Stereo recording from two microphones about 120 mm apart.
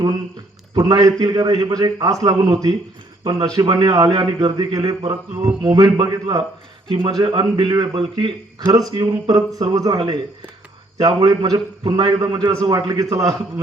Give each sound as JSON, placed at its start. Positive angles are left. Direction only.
{"t": 0.7, "sound": "a man's voice", "side_deg": -30}
{"t": 6.8, "sound": "a man's voice", "side_deg": -45}